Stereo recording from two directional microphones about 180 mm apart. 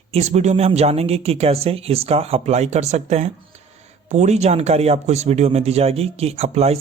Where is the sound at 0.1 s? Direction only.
40° right (ahead or behind).